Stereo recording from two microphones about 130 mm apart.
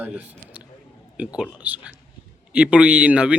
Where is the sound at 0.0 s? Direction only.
10° right (ahead or behind).